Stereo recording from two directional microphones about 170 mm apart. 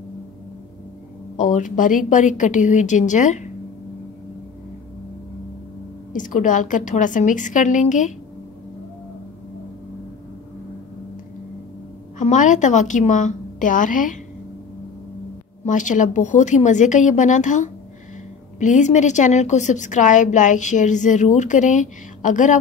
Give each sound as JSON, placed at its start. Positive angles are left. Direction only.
{"t": 1.3, "sound": "a woman's voice", "side_deg": 45}
{"t": 6.1, "sound": "a woman's voice", "side_deg": 50}
{"t": 12.2, "sound": "a woman's voice", "side_deg": 45}
{"t": 15.6, "sound": "a woman's voice", "side_deg": 45}